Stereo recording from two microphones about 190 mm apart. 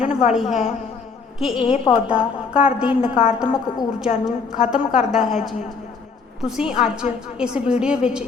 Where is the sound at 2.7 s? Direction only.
5° right (ahead or behind).